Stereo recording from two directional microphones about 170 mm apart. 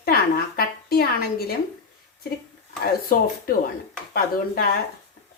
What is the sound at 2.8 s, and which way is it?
Speech, 60° left (ahead or behind).